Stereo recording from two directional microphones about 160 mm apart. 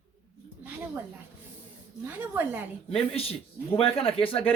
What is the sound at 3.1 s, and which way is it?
Speech, 40° left (ahead or behind).